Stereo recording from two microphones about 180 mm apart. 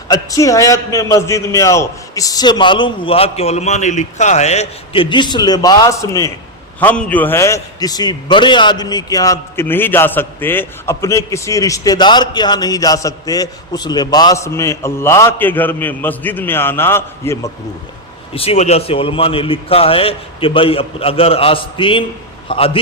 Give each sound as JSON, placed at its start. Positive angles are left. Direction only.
{"t": 0.1, "sound": "a man's voice", "side_deg": 20}
{"t": 18.3, "sound": "a man's voice", "side_deg": 35}